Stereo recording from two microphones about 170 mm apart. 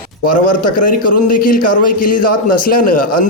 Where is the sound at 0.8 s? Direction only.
55° left (ahead or behind).